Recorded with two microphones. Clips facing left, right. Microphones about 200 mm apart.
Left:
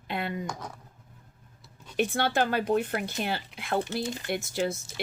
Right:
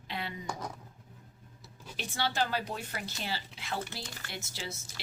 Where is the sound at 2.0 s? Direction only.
55° left (ahead or behind).